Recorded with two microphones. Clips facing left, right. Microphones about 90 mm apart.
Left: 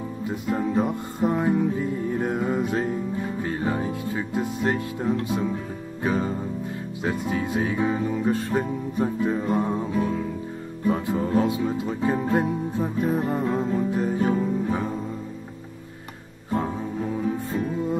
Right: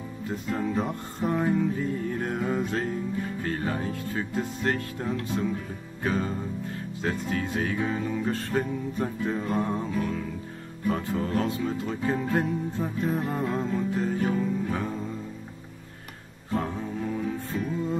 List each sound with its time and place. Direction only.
0.3 s music: 20° left (ahead or behind)
16.5 s music: 20° left (ahead or behind)